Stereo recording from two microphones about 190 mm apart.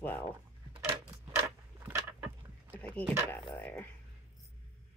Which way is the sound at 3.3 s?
10° left (ahead or behind).